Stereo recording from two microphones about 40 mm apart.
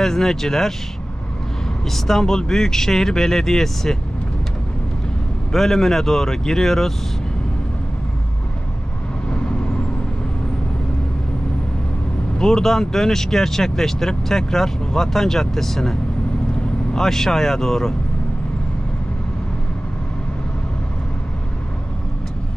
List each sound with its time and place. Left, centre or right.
0.0 s speech: centre
1.9 s speech: centre
5.5 s speech: centre
12.4 s speech: centre